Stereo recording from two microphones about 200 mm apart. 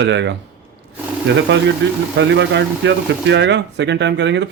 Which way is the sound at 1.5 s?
65° right (ahead or behind).